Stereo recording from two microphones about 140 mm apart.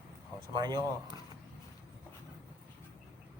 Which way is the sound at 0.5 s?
30° right (ahead or behind).